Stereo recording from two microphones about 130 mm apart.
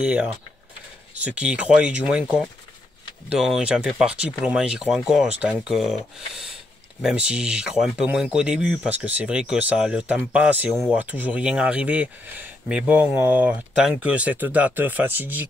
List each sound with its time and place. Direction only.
0.0 s speech: 10° right (ahead or behind)